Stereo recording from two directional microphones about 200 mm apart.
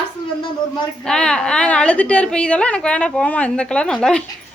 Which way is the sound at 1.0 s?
5° left (ahead or behind).